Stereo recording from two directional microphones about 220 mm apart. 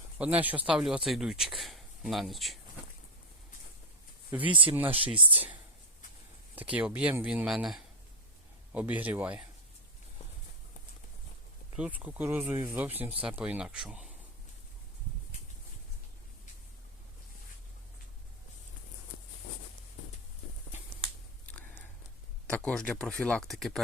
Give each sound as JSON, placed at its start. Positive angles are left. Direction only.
{"t": 0.2, "sound": "speech", "side_deg": -5}
{"t": 4.4, "sound": "speech", "side_deg": -20}
{"t": 4.7, "sound": "speech", "side_deg": -10}
{"t": 4.9, "sound": "speech", "side_deg": -25}
{"t": 5.3, "sound": "speech", "side_deg": -5}
{"t": 6.6, "sound": "speech", "side_deg": -5}
{"t": 11.8, "sound": "speech", "side_deg": -5}
{"t": 22.4, "sound": "speech", "side_deg": 5}